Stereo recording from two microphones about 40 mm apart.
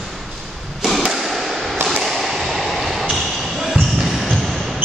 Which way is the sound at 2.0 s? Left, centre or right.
Centre.